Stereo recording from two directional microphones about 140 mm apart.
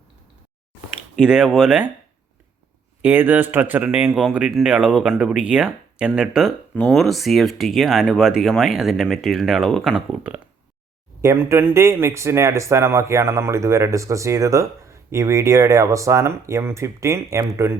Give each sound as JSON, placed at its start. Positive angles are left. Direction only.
{"t": 1.2, "sound": "speech", "side_deg": -5}
{"t": 3.0, "sound": "speech", "side_deg": -15}
{"t": 11.2, "sound": "speech", "side_deg": -20}